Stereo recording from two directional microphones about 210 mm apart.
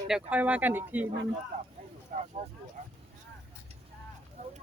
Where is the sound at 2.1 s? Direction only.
35° right (ahead or behind).